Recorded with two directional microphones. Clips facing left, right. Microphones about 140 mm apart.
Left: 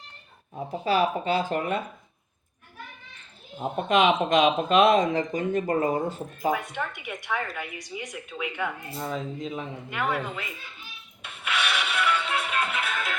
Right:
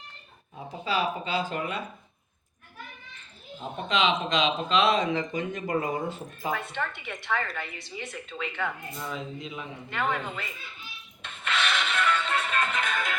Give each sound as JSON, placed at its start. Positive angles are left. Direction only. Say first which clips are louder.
{"t": 0.9, "sound": "speech", "louder": "left 5 dB", "side_deg": 50}
{"t": 3.6, "sound": "speech", "louder": "left 5 dB", "side_deg": 55}
{"t": 6.5, "sound": "a woman's voice", "louder": "left 1 dB", "side_deg": 10}
{"t": 8.9, "sound": "speech", "louder": "left 4 dB", "side_deg": 35}
{"t": 9.9, "sound": "a woman's voice", "louder": "left 1 dB", "side_deg": 10}
{"t": 11.2, "sound": "music", "louder": "even", "side_deg": 10}